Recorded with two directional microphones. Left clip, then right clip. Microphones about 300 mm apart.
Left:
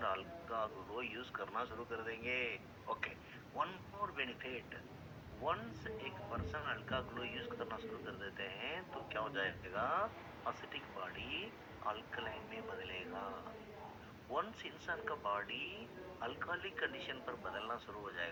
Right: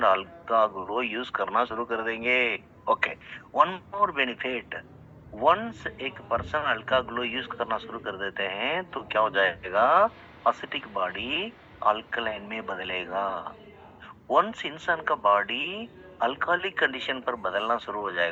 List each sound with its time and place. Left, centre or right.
0.0 s a man's voice: right